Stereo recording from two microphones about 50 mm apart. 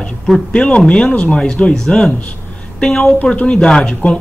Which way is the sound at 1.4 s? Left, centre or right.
Centre.